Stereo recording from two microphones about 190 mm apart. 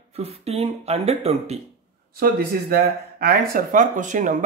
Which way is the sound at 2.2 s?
50° right (ahead or behind).